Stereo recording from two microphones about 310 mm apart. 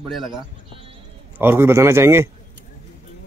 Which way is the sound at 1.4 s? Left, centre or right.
Centre.